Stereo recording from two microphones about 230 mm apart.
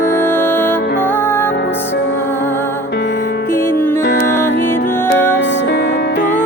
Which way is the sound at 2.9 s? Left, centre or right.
Left.